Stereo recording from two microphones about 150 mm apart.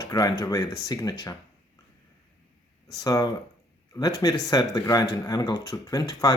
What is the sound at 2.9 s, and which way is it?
Speech, 25° left (ahead or behind).